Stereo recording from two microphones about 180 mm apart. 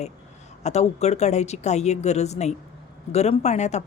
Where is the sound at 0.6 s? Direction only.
35° left (ahead or behind).